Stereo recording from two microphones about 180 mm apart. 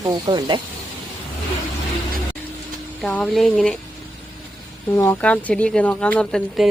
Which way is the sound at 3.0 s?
Centre (ahead or behind).